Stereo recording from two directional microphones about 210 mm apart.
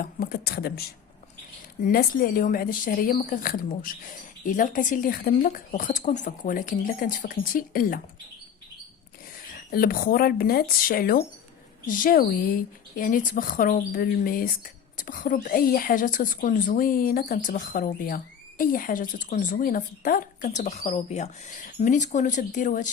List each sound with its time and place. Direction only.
0.0 s speech: 45° left (ahead or behind)
9.6 s speech: 45° left (ahead or behind)